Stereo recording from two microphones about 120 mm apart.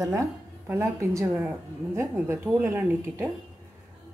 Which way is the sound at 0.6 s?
20° right (ahead or behind).